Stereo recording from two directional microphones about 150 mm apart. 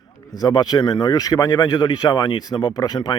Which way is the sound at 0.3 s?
25° left (ahead or behind).